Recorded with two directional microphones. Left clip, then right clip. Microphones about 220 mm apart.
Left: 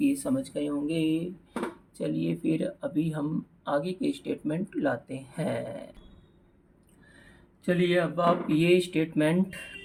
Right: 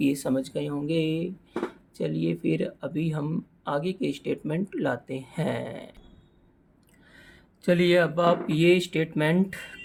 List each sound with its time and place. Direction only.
0.0 s speech: 40° right (ahead or behind)
7.6 s speech: 45° right (ahead or behind); by 9.6 s 30° right (ahead or behind)